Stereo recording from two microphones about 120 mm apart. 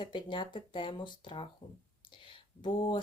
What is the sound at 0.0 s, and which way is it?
Speech, 40° left (ahead or behind).